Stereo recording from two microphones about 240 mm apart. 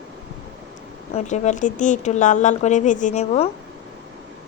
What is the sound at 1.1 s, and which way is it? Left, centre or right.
A woman's voice, left.